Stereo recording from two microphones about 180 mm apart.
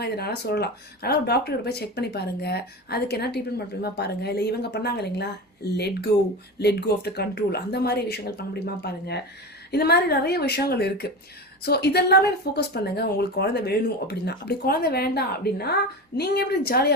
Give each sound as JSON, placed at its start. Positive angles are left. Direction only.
{"t": 0.0, "sound": "speech", "side_deg": 65}